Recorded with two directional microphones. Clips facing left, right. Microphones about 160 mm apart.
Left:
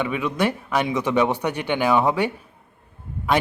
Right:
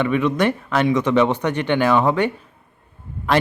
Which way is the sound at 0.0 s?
10° left (ahead or behind).